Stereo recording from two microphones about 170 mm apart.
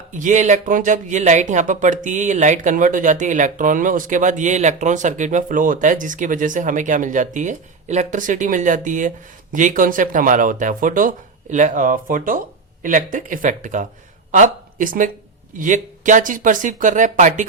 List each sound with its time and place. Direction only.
0.1 s speech: 50° right (ahead or behind)